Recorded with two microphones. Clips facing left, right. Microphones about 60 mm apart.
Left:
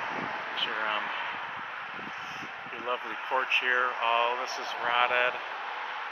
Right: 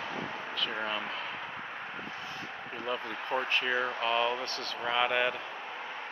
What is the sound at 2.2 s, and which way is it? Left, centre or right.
Speech, left.